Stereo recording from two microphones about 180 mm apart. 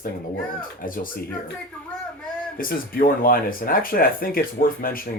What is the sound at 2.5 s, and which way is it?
Speech, 55° left (ahead or behind).